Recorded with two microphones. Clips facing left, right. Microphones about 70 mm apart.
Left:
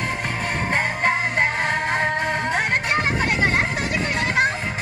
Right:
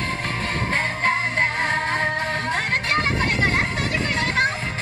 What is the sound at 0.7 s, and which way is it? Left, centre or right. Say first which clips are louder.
Music: left 1 dB; centre.